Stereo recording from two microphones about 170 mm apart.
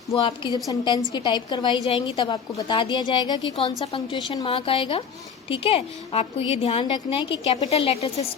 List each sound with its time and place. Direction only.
0.1 s a woman's voice: 30° left (ahead or behind)